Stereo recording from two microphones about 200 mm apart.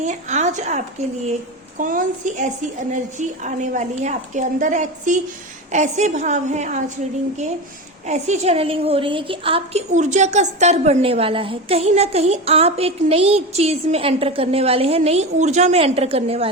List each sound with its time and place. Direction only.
0.0 s a woman's voice: 35° right (ahead or behind)
1.8 s a woman's voice: 40° right (ahead or behind)
8.0 s a woman's voice: 35° right (ahead or behind)